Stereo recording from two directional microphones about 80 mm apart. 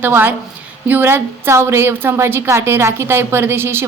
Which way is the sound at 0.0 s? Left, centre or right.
Right.